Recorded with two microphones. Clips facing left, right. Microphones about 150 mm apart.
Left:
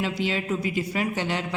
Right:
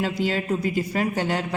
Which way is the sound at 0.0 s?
45° right (ahead or behind).